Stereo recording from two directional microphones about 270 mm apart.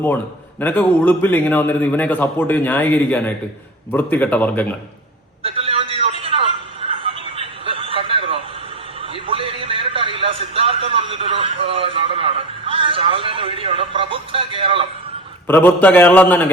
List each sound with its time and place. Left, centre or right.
0.6 s a man's voice: centre
5.4 s a sound: right
15.4 s a man's voice: centre